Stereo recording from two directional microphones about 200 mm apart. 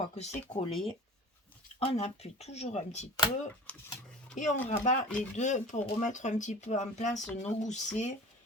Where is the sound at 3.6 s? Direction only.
5° left (ahead or behind).